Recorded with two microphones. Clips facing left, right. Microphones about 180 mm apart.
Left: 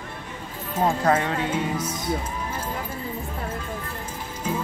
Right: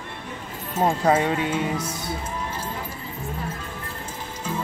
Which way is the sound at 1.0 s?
10° right (ahead or behind).